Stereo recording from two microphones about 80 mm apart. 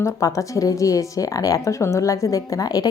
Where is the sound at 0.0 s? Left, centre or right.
Left.